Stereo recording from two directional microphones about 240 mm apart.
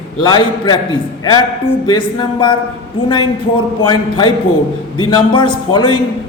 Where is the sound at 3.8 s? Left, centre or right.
Centre.